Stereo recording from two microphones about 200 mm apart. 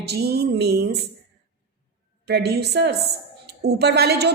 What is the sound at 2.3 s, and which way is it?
A woman's voice, 55° right (ahead or behind).